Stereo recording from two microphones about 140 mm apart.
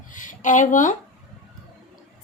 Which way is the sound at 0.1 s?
65° left (ahead or behind).